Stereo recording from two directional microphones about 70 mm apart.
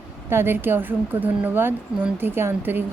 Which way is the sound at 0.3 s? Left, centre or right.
Right.